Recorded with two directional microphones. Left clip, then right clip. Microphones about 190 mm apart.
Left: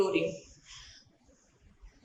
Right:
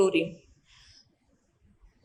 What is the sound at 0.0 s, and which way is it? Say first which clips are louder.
Speech: right 4 dB; 45° right (ahead or behind).